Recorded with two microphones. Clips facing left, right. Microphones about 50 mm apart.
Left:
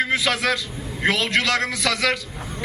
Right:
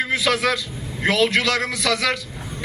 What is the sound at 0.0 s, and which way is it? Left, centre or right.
A man's voice, centre.